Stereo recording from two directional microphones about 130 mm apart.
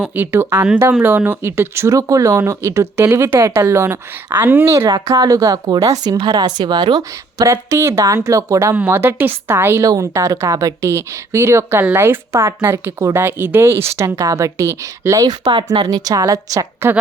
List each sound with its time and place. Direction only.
0.0 s a woman's voice: 15° right (ahead or behind); by 7.4 s 35° right (ahead or behind)
7.4 s speech: 20° right (ahead or behind)